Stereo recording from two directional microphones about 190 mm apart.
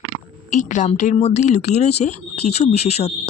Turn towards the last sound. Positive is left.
turn(degrees=35)  # may be behind; listen again after turning